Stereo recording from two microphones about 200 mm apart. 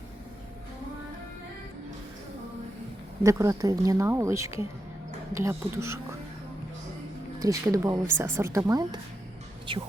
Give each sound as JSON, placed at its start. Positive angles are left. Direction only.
{"t": 3.2, "sound": "a woman's voice", "side_deg": -15}
{"t": 7.3, "sound": "a woman's voice", "side_deg": -15}